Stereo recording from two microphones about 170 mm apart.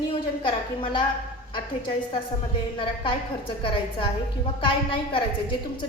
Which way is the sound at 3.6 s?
30° left (ahead or behind).